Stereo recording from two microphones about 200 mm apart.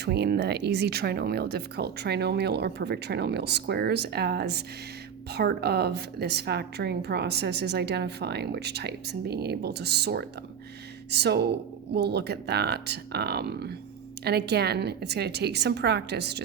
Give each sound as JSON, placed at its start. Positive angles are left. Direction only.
{"t": 0.0, "sound": "a woman's voice", "side_deg": -55}